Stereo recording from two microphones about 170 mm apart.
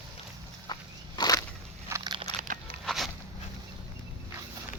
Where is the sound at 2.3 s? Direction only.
50° right (ahead or behind).